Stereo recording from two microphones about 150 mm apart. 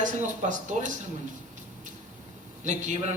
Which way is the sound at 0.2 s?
55° right (ahead or behind).